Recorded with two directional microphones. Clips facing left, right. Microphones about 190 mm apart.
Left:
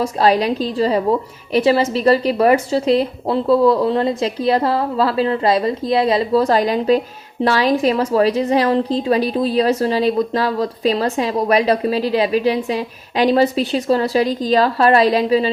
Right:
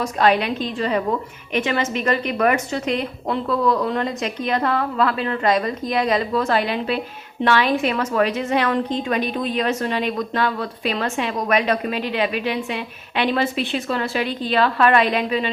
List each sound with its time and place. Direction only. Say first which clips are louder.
0.0 s a woman's voice: left 3 dB; 35° left (ahead or behind)